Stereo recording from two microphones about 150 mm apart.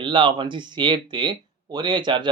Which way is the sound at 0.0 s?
30° right (ahead or behind).